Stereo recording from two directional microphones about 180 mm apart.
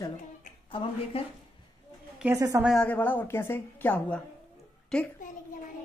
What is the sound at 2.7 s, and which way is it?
A woman's voice, 5° left (ahead or behind).